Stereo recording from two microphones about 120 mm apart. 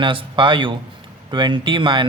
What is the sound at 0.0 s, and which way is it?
Speech, 45° right (ahead or behind).